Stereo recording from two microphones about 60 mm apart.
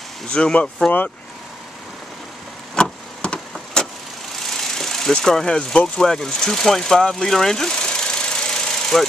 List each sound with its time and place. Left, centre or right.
0.3 s speech: centre
2.7 s vehicle: centre
4.5 s vehicle: centre
5.9 s speech: centre